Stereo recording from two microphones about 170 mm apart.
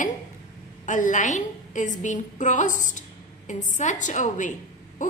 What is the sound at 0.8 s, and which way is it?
A woman's voice, 50° left (ahead or behind).